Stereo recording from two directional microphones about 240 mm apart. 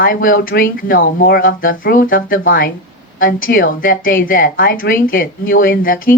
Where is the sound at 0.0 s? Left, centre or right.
Left.